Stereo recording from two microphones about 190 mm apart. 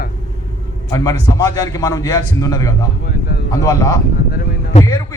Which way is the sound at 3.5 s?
20° left (ahead or behind).